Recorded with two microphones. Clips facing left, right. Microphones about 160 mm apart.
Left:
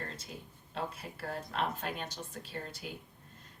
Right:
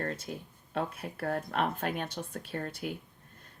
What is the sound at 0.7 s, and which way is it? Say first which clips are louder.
Speech: right 5 dB; 55° right (ahead or behind).